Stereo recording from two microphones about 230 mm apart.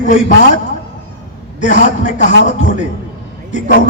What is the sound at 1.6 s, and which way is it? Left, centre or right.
Speech, left.